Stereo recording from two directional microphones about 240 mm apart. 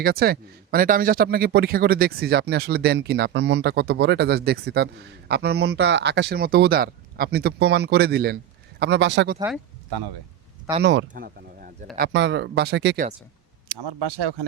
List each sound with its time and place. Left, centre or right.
0.0 s speech: right
10.7 s speech: centre
11.1 s speech: right
11.9 s speech: right